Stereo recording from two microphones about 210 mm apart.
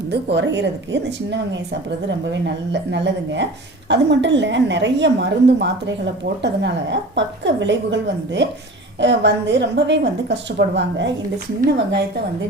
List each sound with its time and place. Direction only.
0.1 s a woman's voice: 55° right (ahead or behind)